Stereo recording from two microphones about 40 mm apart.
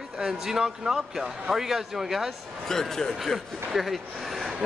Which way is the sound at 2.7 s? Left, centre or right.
Centre.